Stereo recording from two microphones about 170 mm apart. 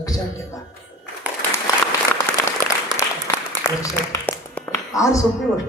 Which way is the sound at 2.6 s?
15° left (ahead or behind).